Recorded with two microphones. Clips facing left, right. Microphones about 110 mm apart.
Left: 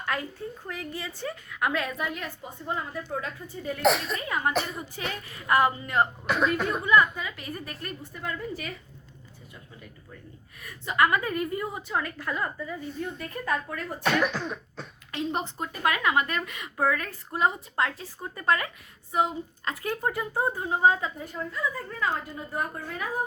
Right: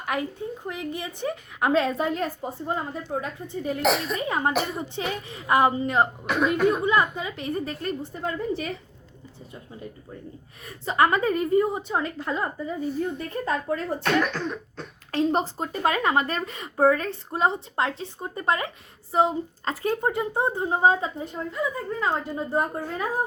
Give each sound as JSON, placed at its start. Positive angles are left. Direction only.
{"t": 0.0, "sound": "a woman's voice", "side_deg": -20}
{"t": 6.2, "sound": "cough", "side_deg": 0}
{"t": 6.7, "sound": "a woman's voice", "side_deg": -25}
{"t": 10.6, "sound": "a woman's voice", "side_deg": -30}
{"t": 14.0, "sound": "cough", "side_deg": 5}
{"t": 15.1, "sound": "a woman's voice", "side_deg": -35}
{"t": 22.4, "sound": "a woman's voice", "side_deg": -30}